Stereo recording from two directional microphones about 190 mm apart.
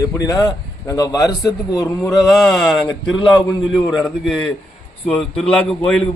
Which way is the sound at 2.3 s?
Centre (ahead or behind).